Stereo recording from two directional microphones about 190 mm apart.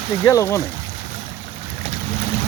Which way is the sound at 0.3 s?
15° left (ahead or behind).